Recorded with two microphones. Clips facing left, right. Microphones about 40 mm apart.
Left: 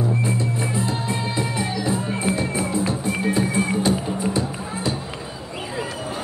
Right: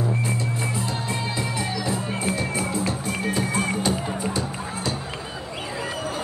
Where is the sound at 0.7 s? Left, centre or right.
Left.